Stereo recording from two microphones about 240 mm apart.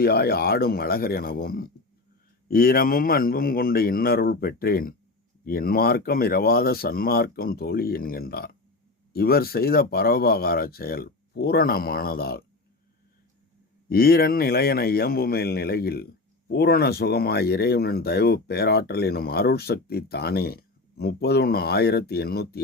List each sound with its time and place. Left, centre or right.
0.0 s speech: left
13.9 s speech: left